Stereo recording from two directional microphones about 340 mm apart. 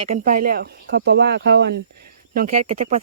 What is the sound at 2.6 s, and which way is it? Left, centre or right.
Speech, centre.